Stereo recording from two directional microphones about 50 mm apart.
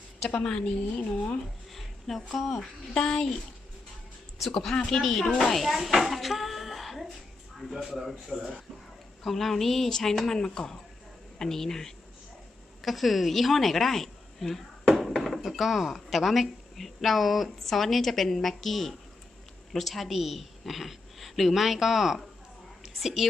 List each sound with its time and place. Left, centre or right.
0.4 s speech: centre
0.9 s speech: left
1.7 s a sound: centre
2.6 s speech: centre
4.9 s a woman's voice: centre